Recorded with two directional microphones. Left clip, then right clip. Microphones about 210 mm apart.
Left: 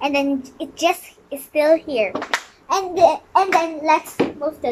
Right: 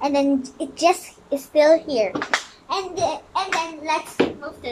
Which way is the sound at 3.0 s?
30° left (ahead or behind).